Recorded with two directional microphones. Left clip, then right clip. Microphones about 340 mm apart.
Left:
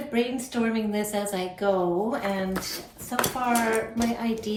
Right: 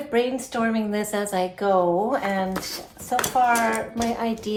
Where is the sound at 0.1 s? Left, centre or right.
Centre.